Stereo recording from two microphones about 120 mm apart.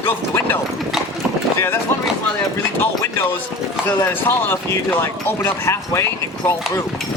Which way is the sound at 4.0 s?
15° left (ahead or behind).